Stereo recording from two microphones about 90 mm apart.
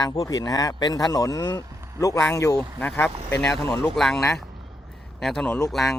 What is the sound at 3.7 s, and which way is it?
Speech, 5° left (ahead or behind).